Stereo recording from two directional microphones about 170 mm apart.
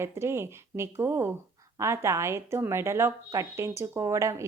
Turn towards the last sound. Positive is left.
turn(degrees=-20)  # may be behind; listen again after turning